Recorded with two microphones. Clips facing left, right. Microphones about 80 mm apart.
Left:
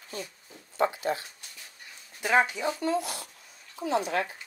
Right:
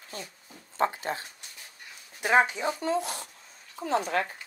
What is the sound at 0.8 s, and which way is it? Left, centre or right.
Speech, right.